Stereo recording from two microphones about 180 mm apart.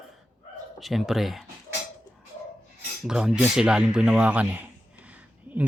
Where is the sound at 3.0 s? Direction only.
5° right (ahead or behind).